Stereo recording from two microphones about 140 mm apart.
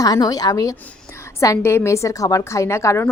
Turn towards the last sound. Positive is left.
turn(degrees=20)  # may be behind; listen again after turning